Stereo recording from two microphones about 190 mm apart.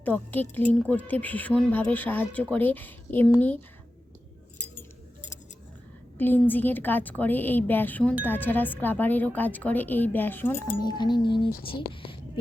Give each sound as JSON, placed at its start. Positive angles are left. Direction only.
{"t": 0.0, "sound": "a woman's voice", "side_deg": 10}
{"t": 6.1, "sound": "a woman's voice", "side_deg": 10}
{"t": 10.8, "sound": "speech", "side_deg": 20}